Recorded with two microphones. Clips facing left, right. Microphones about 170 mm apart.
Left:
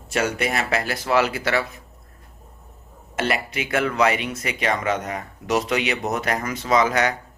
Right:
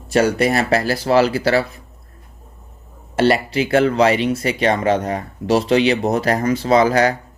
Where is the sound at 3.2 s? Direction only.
30° right (ahead or behind).